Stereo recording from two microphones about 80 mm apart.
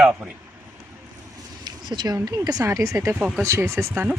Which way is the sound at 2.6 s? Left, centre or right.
Right.